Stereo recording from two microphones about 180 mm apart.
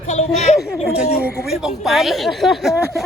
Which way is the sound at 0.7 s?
5° right (ahead or behind).